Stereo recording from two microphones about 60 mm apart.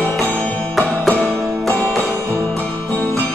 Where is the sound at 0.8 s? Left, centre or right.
Left.